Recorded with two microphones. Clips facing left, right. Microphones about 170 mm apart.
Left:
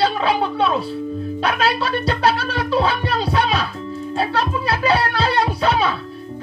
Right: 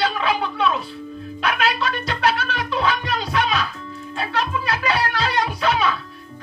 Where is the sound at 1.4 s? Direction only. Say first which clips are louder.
Left 1 dB; 30° left (ahead or behind).